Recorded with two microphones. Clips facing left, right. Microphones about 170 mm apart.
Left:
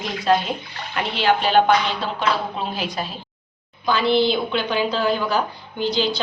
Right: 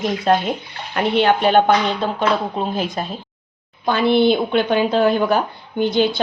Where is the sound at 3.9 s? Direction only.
55° right (ahead or behind).